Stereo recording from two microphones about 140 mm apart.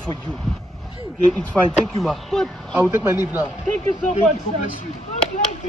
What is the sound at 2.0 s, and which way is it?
Speech, 5° left (ahead or behind).